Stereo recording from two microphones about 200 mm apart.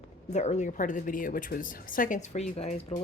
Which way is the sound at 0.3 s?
35° left (ahead or behind).